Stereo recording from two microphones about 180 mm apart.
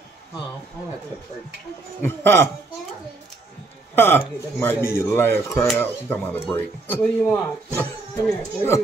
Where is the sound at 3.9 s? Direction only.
10° left (ahead or behind).